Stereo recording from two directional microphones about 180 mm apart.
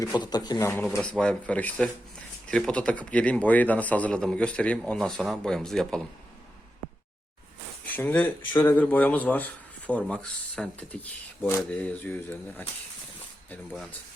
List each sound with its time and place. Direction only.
0.0 s speech: 20° left (ahead or behind)
0.9 s speech: 5° left (ahead or behind)
7.9 s speech: 10° left (ahead or behind)